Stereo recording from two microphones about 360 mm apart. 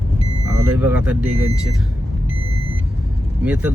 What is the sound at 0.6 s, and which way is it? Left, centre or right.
Speech, centre.